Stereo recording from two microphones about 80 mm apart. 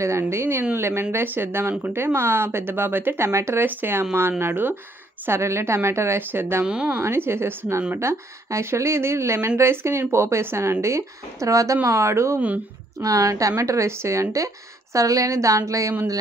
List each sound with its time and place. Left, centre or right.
0.0 s speech: right
3.3 s speech: right
3.6 s speech: right
6.6 s speech: centre
7.0 s speech: right